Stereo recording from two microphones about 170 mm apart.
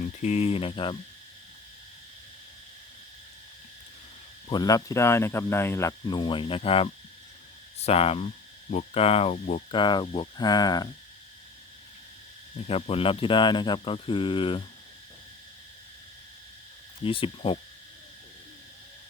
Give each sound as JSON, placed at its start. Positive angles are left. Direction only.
{"t": 0.0, "sound": "cricket", "side_deg": 45}
{"t": 4.4, "sound": "speech", "side_deg": 25}
{"t": 7.8, "sound": "cricket", "side_deg": 35}
{"t": 8.7, "sound": "speech", "side_deg": 35}
{"t": 12.6, "sound": "speech", "side_deg": 35}
{"t": 17.0, "sound": "cricket", "side_deg": 30}